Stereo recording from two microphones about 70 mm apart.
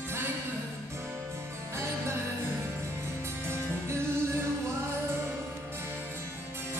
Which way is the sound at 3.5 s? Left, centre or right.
Right.